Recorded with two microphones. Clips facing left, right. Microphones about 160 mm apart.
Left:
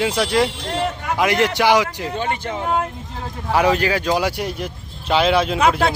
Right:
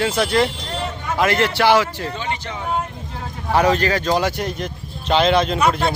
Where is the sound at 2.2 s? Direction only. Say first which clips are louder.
Left 3 dB; 50° left (ahead or behind).